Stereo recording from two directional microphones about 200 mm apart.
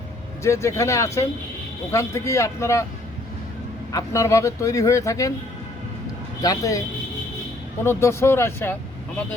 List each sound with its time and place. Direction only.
0.4 s speech: 15° left (ahead or behind)
3.9 s speech: 15° left (ahead or behind)
6.4 s speech: 15° left (ahead or behind)
7.9 s speech: 15° left (ahead or behind)